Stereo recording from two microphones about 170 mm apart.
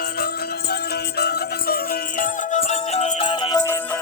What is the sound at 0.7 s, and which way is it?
Music, 70° left (ahead or behind).